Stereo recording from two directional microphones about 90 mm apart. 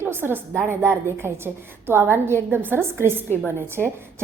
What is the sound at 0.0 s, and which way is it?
A woman's voice, 25° right (ahead or behind).